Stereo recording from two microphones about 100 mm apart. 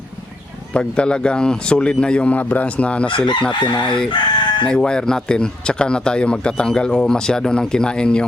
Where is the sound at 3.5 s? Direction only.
50° left (ahead or behind).